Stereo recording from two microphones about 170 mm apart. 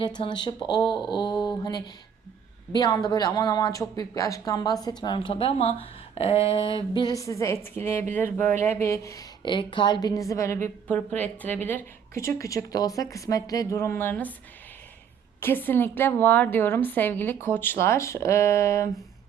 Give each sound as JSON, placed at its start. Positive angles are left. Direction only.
{"t": 0.0, "sound": "a woman's voice", "side_deg": 25}
{"t": 15.4, "sound": "a woman's voice", "side_deg": 10}